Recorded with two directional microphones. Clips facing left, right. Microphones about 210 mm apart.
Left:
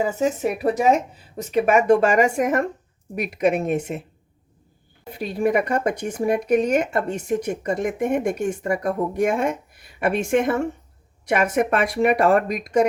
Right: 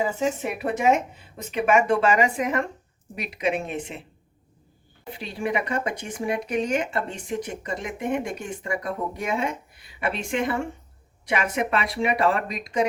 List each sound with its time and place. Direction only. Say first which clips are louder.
0.0 s speech: left 4 dB; 40° left (ahead or behind)
5.1 s speech: left 7 dB; 45° left (ahead or behind)